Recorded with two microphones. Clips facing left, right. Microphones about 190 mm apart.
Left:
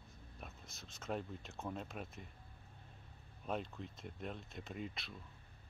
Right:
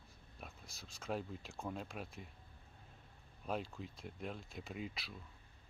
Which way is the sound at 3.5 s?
Centre (ahead or behind).